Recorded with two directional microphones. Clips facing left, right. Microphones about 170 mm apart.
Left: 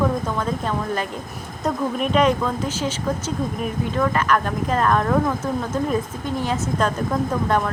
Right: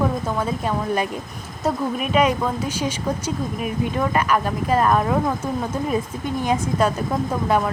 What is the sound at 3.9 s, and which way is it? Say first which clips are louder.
Speech: left 1 dB; 10° right (ahead or behind).